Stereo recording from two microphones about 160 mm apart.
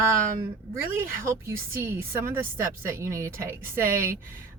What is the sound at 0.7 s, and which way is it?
Speech, 15° right (ahead or behind).